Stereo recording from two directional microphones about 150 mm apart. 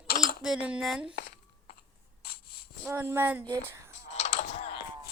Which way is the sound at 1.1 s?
55° left (ahead or behind).